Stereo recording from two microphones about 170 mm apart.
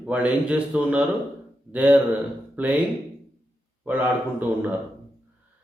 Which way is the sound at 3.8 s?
10° right (ahead or behind).